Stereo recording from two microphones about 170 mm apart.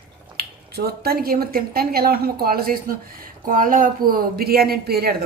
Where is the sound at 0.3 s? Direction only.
65° right (ahead or behind).